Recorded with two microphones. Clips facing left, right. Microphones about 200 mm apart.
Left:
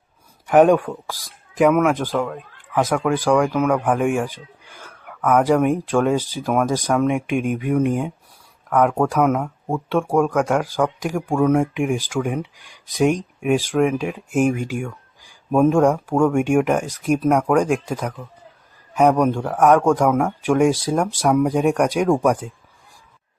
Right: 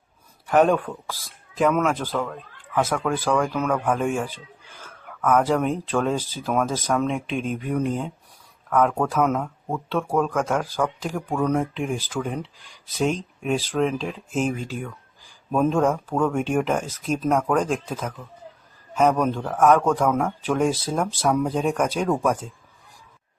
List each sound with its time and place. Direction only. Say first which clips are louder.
0.4 s speech: left 5 dB; 15° left (ahead or behind)
5.0 s a sound: left 2 dB; centre (ahead or behind)
5.4 s speech: left 5 dB; 10° left (ahead or behind)